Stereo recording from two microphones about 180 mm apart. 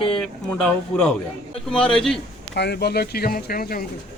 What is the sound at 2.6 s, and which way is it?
Speech, 65° left (ahead or behind).